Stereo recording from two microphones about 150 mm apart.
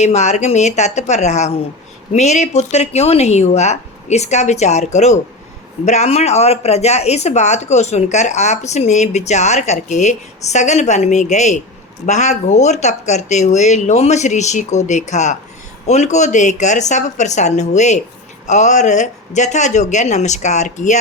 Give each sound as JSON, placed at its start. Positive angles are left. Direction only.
{"t": 0.0, "sound": "speech", "side_deg": 50}